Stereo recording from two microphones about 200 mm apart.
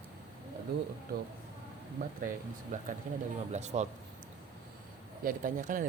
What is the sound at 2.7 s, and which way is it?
Speech, 40° right (ahead or behind).